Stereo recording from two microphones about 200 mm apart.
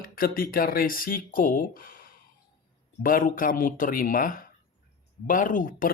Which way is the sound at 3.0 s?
45° left (ahead or behind).